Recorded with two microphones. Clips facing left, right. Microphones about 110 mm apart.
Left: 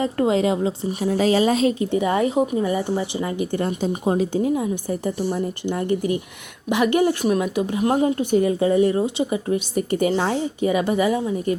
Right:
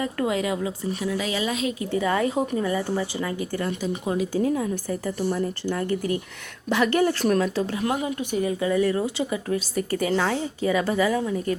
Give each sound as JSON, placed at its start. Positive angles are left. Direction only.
{"t": 0.0, "sound": "speech", "side_deg": 30}
{"t": 1.9, "sound": "a woman's voice", "side_deg": 20}
{"t": 7.9, "sound": "a woman's voice", "side_deg": 35}